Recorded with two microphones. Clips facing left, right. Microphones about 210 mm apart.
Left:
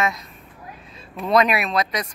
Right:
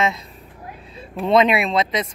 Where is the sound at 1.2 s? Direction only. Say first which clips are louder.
Right 3 dB; 25° right (ahead or behind).